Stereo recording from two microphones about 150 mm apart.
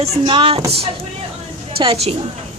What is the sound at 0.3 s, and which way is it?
Speech, 35° right (ahead or behind).